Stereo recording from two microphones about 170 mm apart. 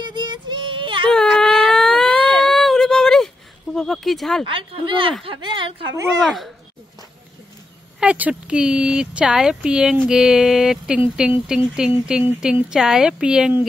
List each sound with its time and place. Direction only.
0.0 s child singing: 25° right (ahead or behind)
1.1 s whimper: 5° left (ahead or behind)
2.4 s a sound: centre (ahead or behind)
4.5 s a woman's voice: 30° right (ahead or behind)
6.2 s speech: centre (ahead or behind)
8.0 s speech: 5° right (ahead or behind)